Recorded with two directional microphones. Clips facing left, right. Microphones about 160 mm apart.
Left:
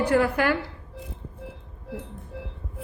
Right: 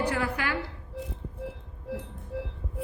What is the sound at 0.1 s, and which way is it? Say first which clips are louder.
Speech: left 8 dB; 50° left (ahead or behind).